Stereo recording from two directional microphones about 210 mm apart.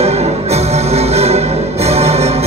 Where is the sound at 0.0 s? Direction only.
30° right (ahead or behind).